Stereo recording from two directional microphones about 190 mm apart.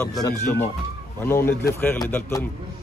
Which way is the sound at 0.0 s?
20° left (ahead or behind).